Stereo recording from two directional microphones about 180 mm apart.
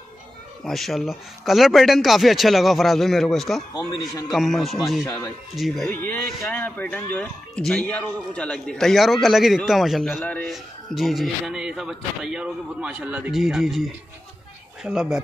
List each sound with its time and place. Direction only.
0.7 s a man's voice: centre (ahead or behind)
5.0 s a man's voice: 15° left (ahead or behind); by 15.1 s 5° right (ahead or behind)